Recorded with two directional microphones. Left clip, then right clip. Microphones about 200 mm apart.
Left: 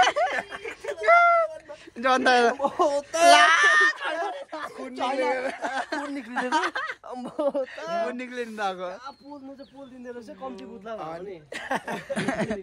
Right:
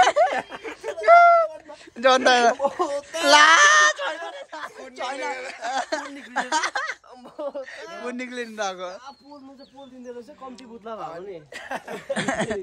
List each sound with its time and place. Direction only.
0.0 s snicker: 5° right (ahead or behind)
1.0 s a sound: 5° right (ahead or behind)
2.0 s a man's voice: centre (ahead or behind)
4.2 s a sound: centre (ahead or behind)
5.2 s speech: 25° left (ahead or behind)
5.7 s a man's voice: centre (ahead or behind)
7.2 s speech: 30° left (ahead or behind)
7.6 s a man's voice: centre (ahead or behind)
11.1 s speech: 45° left (ahead or behind)
12.2 s a man's voice: centre (ahead or behind)